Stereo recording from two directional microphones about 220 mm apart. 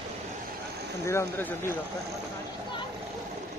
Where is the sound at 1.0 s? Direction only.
10° left (ahead or behind).